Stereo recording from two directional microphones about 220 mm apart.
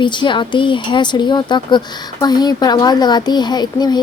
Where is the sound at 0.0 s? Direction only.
20° left (ahead or behind).